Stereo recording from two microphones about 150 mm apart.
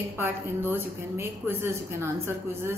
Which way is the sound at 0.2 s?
15° right (ahead or behind).